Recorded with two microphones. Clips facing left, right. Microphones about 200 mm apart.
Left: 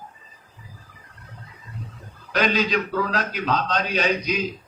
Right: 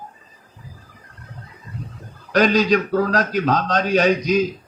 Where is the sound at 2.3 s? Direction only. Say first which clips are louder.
Right 6 dB; 45° right (ahead or behind).